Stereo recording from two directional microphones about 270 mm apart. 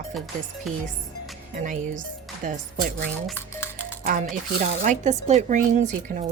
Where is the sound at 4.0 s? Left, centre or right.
Right.